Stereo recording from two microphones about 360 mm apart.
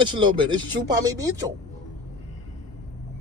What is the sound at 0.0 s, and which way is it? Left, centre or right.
Speech, centre.